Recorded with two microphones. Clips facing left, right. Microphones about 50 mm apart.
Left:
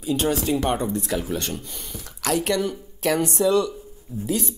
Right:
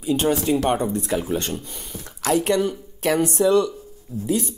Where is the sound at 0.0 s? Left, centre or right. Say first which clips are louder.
Right 2 dB; right.